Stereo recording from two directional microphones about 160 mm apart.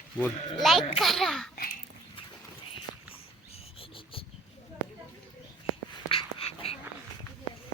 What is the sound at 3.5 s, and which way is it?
Cricket, 35° left (ahead or behind).